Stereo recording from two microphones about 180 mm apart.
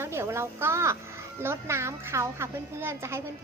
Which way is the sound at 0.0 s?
15° right (ahead or behind).